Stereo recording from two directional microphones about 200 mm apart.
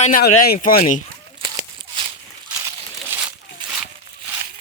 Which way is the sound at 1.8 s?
25° right (ahead or behind).